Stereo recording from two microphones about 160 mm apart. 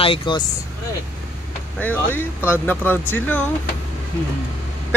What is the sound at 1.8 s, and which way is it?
Speech, 10° left (ahead or behind).